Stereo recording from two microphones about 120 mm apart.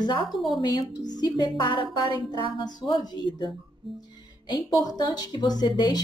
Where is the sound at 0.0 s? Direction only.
40° left (ahead or behind).